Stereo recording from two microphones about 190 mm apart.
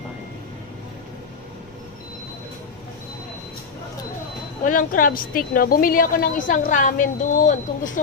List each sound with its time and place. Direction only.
4.6 s a woman's voice: 45° left (ahead or behind)